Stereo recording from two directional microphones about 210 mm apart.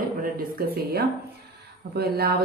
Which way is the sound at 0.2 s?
45° right (ahead or behind).